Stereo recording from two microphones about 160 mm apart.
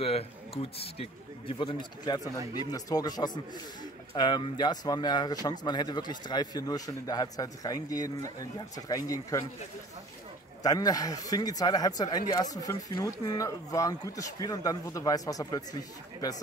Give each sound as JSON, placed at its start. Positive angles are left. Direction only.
{"t": 0.0, "sound": "speech", "side_deg": 40}
{"t": 10.6, "sound": "speech", "side_deg": 25}